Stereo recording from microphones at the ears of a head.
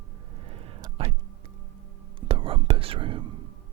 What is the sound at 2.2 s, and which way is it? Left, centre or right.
Whispering, right.